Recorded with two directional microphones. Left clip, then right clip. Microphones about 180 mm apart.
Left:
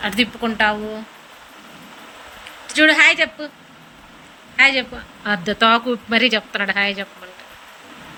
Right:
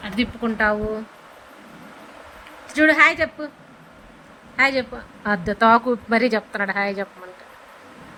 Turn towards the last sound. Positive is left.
turn(degrees=-30)  # may be behind; listen again after turning